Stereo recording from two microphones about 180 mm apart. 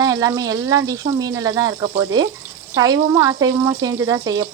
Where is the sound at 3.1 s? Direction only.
15° right (ahead or behind).